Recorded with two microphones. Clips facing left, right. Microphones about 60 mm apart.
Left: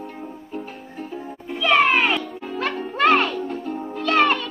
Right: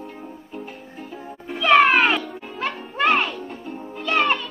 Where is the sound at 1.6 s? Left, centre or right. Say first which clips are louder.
Right 2 dB; right.